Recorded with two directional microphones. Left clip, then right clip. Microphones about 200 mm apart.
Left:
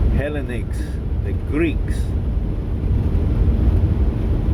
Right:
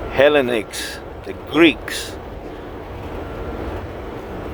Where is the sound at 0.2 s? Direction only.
45° right (ahead or behind).